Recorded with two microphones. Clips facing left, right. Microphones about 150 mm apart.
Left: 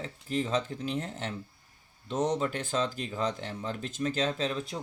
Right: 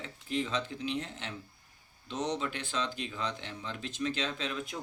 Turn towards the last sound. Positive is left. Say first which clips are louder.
# left 5 dB
turn(degrees=35)  # may be behind; listen again after turning